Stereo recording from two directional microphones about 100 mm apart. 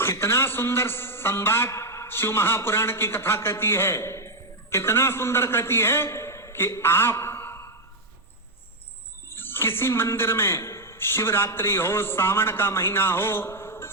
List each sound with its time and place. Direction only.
0.0 s a man's voice: 25° left (ahead or behind)
9.3 s a man's voice: 20° left (ahead or behind)